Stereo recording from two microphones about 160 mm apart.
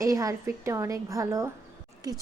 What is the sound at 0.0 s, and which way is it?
A woman's voice, 20° right (ahead or behind).